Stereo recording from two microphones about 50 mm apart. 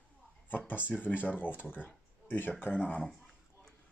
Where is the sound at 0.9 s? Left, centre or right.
Left.